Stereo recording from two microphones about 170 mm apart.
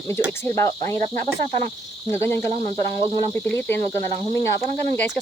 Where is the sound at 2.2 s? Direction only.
40° right (ahead or behind).